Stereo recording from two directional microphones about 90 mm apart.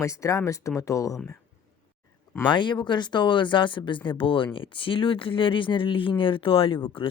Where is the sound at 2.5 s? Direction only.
60° left (ahead or behind).